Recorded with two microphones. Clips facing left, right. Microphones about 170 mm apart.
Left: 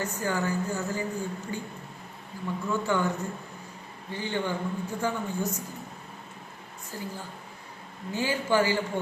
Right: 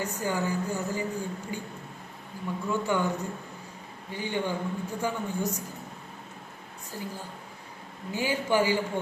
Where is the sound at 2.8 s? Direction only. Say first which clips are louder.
Left 1 dB; 15° right (ahead or behind).